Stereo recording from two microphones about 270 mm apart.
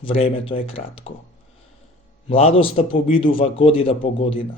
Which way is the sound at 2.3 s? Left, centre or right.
Left.